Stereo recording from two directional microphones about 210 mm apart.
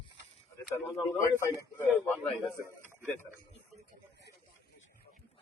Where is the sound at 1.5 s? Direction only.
5° left (ahead or behind).